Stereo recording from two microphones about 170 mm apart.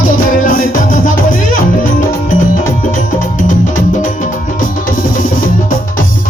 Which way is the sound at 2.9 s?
50° left (ahead or behind).